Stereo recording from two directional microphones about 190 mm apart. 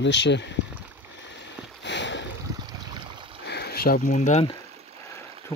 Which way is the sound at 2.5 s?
20° right (ahead or behind).